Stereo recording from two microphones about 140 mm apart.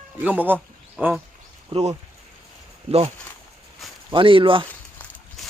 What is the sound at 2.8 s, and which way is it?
Speech, 45° right (ahead or behind).